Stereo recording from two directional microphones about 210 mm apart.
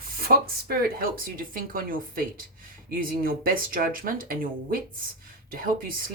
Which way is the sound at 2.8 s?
45° right (ahead or behind).